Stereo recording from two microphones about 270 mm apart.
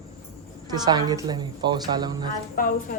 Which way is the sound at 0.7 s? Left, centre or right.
Centre.